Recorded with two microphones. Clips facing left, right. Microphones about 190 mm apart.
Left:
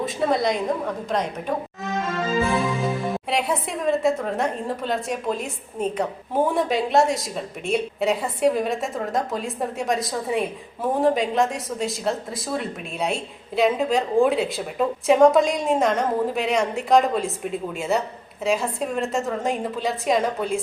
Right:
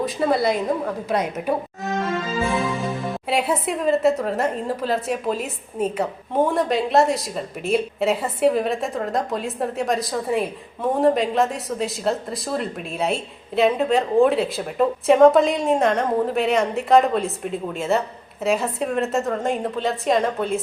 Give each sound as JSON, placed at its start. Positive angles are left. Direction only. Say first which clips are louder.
{"t": 0.0, "sound": "a woman's voice", "louder": "right 2 dB", "side_deg": 0}